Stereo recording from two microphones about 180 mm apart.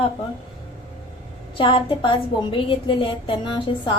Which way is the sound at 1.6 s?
30° left (ahead or behind).